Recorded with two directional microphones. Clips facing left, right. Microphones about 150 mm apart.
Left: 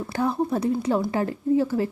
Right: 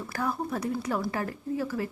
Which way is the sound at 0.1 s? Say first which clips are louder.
Left 7 dB; 25° left (ahead or behind).